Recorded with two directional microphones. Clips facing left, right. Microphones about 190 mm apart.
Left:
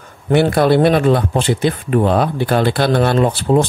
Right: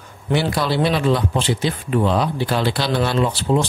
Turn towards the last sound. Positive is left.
turn(degrees=50)  # may be behind; listen again after turning